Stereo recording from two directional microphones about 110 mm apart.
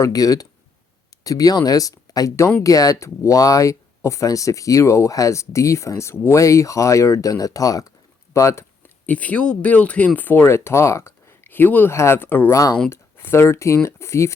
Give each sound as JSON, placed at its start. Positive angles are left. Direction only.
{"t": 0.0, "sound": "speech", "side_deg": 35}